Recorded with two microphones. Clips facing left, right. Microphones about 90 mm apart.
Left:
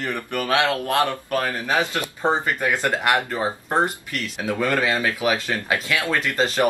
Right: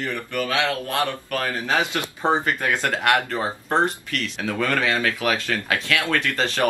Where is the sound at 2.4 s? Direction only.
10° left (ahead or behind).